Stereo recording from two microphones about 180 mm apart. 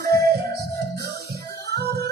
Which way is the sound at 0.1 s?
60° right (ahead or behind).